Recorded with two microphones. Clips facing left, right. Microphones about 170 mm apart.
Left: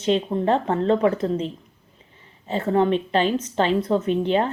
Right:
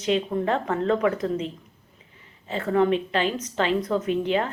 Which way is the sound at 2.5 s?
30° left (ahead or behind).